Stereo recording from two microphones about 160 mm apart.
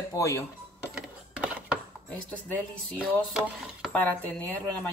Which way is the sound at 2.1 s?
5° left (ahead or behind).